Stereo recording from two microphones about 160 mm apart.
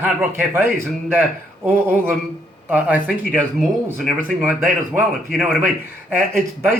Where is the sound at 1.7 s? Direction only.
15° right (ahead or behind).